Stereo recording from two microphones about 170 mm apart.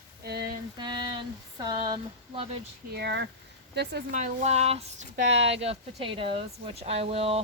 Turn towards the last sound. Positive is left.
turn(degrees=-35)  # may be behind; listen again after turning